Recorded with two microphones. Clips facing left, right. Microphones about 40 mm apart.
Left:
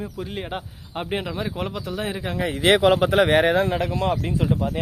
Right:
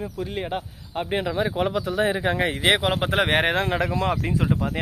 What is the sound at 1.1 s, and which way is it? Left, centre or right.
Speech, centre.